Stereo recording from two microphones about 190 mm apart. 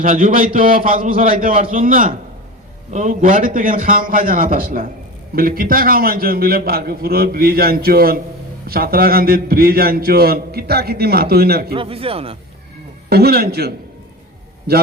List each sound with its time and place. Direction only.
0.0 s a man's voice: 45° right (ahead or behind)
11.7 s speech: 30° right (ahead or behind)
13.1 s a man's voice: 55° right (ahead or behind)